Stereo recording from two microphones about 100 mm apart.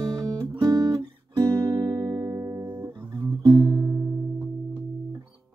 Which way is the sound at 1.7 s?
35° right (ahead or behind).